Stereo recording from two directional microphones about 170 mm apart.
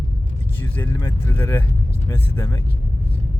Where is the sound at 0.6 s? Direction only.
10° left (ahead or behind).